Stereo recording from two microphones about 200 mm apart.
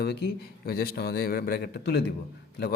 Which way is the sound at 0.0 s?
55° left (ahead or behind).